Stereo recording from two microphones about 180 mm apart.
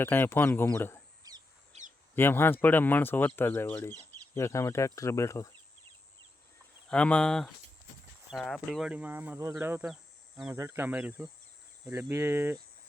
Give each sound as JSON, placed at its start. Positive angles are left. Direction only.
{"t": 0.0, "sound": "speech", "side_deg": 10}
{"t": 1.2, "sound": "chicken", "side_deg": -20}
{"t": 1.7, "sound": "a sound", "side_deg": -35}
{"t": 2.1, "sound": "speech", "side_deg": 10}
{"t": 6.9, "sound": "speech", "side_deg": 5}
{"t": 10.5, "sound": "speech", "side_deg": -15}